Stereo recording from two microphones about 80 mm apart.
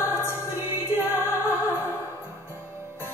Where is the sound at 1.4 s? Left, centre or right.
Right.